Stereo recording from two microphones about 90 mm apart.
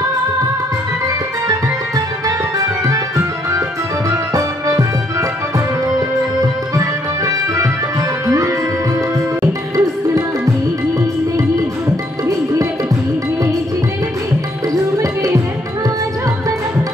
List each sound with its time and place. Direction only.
2.2 s music: 40° right (ahead or behind)
4.1 s music: 40° right (ahead or behind)
5.9 s music: 45° right (ahead or behind)
9.4 s music: 40° right (ahead or behind)
15.0 s music: 35° right (ahead or behind)